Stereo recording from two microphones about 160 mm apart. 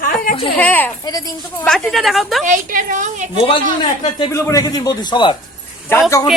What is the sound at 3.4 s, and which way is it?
Speech, 25° left (ahead or behind).